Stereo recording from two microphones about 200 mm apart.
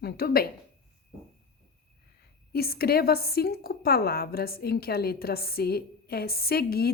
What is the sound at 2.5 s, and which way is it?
A woman's voice, 50° left (ahead or behind).